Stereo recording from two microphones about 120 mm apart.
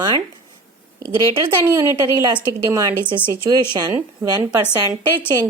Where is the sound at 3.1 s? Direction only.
40° right (ahead or behind).